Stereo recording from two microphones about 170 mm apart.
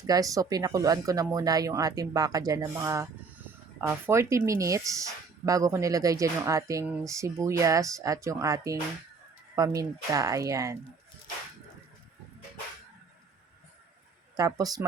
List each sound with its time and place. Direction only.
0.0 s speech: 20° right (ahead or behind)
6.8 s speech: 5° right (ahead or behind)
7.1 s speech: 20° right (ahead or behind)
14.3 s speech: 20° right (ahead or behind)